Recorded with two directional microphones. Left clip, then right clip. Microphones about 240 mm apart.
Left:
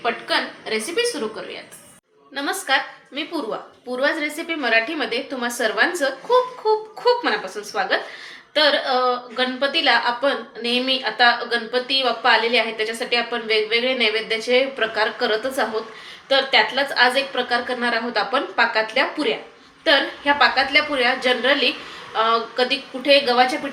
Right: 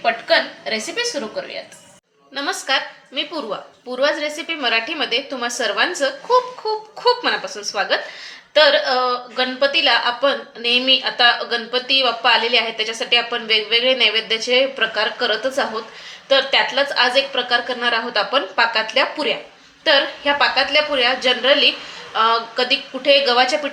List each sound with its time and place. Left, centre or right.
0.0 s a woman's voice: right
2.3 s a woman's voice: right